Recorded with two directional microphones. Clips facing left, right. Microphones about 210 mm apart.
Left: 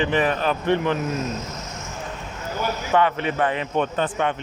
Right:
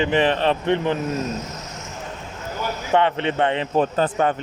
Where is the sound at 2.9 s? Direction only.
25° right (ahead or behind).